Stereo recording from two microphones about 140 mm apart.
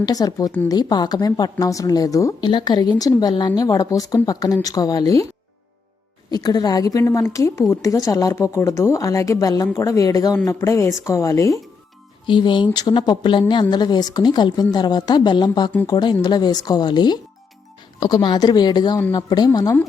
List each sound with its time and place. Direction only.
0.0 s a woman's voice: 25° left (ahead or behind)
6.3 s a woman's voice: 30° left (ahead or behind)
12.2 s a woman's voice: 35° left (ahead or behind)